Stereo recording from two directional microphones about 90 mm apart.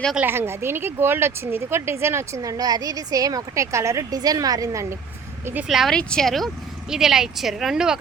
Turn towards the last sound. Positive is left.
turn(degrees=-5)  # may be behind; listen again after turning